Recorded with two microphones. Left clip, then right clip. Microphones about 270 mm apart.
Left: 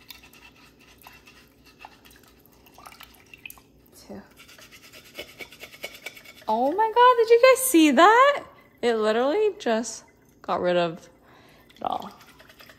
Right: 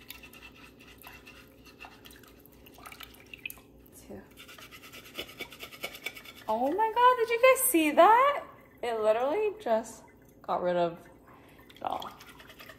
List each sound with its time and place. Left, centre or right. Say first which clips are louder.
4.1 s a woman's voice: left 4 dB; left
4.7 s a sound: left 1 dB; centre
6.4 s a woman's voice: left 5 dB; left
11.8 s drip: left 6 dB; left